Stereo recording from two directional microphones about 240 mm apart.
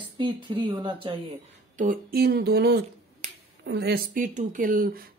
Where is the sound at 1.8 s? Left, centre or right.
Right.